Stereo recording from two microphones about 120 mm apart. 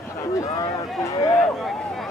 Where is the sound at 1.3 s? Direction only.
Centre (ahead or behind).